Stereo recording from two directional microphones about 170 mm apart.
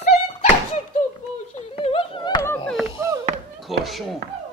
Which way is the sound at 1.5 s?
35° left (ahead or behind).